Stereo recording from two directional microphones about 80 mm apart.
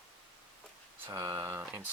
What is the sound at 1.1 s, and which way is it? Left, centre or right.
Speech, right.